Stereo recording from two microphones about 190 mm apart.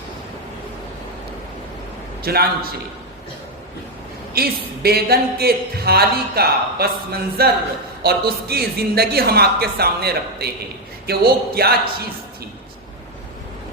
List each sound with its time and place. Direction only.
2.2 s a man's voice: 55° right (ahead or behind)
4.4 s speech: 55° right (ahead or behind)